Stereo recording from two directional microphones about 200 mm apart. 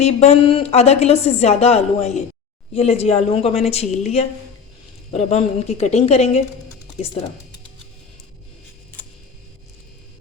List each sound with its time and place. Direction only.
0.0 s speech: 30° left (ahead or behind)